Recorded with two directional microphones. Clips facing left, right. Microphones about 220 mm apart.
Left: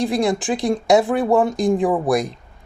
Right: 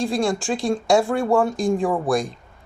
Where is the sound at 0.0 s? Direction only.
20° left (ahead or behind).